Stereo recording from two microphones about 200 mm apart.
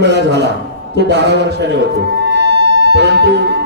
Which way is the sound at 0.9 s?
60° right (ahead or behind).